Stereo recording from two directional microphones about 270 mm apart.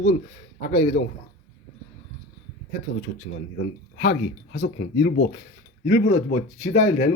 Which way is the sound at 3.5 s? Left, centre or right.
Left.